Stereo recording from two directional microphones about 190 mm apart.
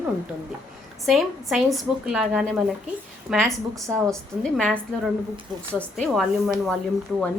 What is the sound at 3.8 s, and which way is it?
Speech, 15° right (ahead or behind).